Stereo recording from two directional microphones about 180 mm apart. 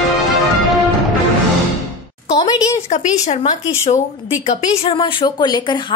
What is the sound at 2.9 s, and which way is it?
A woman's voice, 40° left (ahead or behind).